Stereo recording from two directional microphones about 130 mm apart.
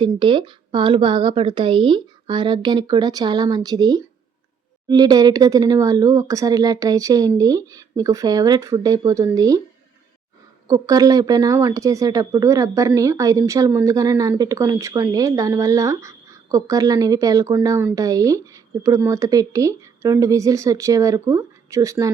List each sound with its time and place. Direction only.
0.0 s a woman's voice: 40° right (ahead or behind)
10.7 s speech: 30° right (ahead or behind)